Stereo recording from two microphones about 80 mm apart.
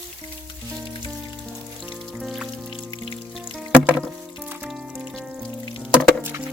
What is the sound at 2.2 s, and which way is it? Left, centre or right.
Music, centre.